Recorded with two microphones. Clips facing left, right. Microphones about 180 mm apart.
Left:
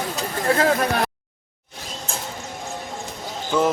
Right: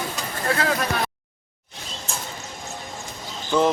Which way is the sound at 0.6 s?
45° left (ahead or behind).